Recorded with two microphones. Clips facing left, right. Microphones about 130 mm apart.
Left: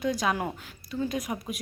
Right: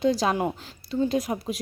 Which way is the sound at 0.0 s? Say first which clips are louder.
Right 5 dB; 30° right (ahead or behind).